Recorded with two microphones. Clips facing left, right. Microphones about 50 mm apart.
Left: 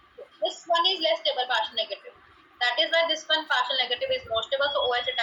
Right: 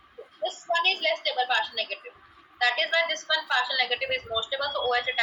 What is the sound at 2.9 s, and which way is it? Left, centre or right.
A woman's voice, left.